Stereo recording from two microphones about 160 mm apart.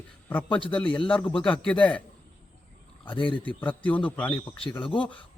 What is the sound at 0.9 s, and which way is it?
Speech, 5° left (ahead or behind).